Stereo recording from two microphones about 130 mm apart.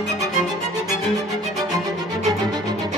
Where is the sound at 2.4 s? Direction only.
30° right (ahead or behind).